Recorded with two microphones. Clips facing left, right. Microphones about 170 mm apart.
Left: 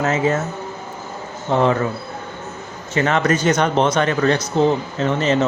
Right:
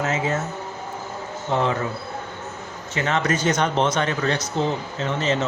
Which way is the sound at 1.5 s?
60° left (ahead or behind).